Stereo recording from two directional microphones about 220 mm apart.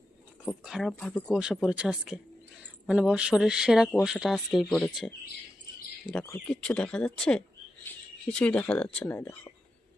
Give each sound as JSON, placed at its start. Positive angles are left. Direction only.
{"t": 0.4, "sound": "speech", "side_deg": 0}
{"t": 6.1, "sound": "speech", "side_deg": 5}